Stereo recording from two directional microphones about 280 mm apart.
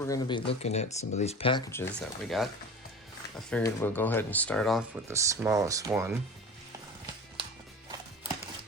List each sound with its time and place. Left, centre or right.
0.0 s speech: centre